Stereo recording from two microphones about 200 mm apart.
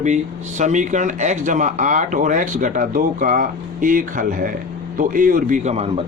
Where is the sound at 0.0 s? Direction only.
35° right (ahead or behind).